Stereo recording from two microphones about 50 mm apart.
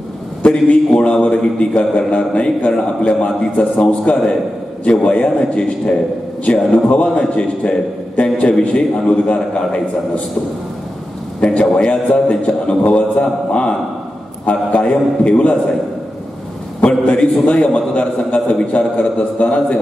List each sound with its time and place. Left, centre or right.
0.4 s a man's voice: left
11.4 s a man's voice: left
17.0 s a man's voice: left